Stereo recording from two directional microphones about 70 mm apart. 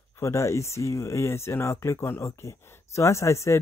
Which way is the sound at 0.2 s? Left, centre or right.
Left.